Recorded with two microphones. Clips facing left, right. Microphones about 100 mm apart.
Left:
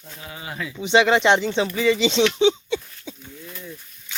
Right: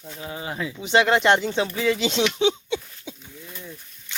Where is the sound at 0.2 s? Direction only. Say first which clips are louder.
Right 3 dB; 25° right (ahead or behind).